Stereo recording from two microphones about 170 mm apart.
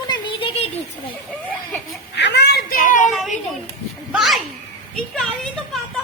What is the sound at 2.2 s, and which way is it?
Speech, 85° left.